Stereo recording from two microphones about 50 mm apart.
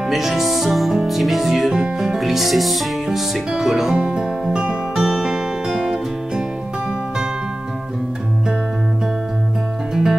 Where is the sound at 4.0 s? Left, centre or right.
Centre.